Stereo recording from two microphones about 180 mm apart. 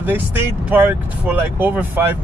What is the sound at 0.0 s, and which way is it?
Speech, 10° right (ahead or behind).